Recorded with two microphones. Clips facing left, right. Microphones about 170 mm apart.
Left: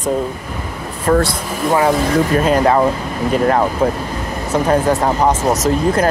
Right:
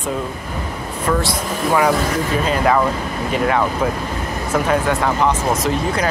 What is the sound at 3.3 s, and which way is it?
Speech, 40° left (ahead or behind).